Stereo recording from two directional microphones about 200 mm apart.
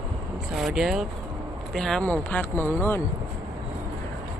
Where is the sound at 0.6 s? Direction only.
Centre (ahead or behind).